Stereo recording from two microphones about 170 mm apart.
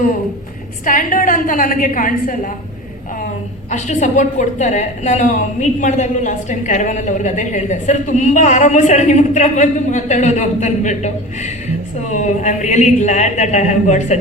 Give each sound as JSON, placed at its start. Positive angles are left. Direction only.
{"t": 0.9, "sound": "a woman's voice", "side_deg": 55}
{"t": 3.7, "sound": "a woman's voice", "side_deg": 45}